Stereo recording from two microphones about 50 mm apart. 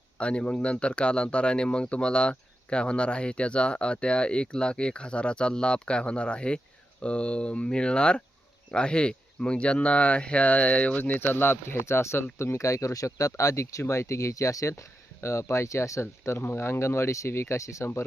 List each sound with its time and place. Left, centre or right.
0.2 s speech: left